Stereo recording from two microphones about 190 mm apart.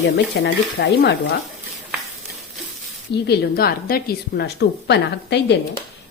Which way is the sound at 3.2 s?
55° left (ahead or behind).